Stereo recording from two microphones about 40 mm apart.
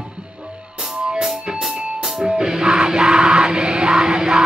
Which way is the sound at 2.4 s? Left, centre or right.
Centre.